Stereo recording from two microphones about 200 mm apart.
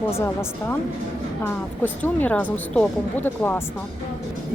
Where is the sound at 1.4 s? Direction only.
10° left (ahead or behind).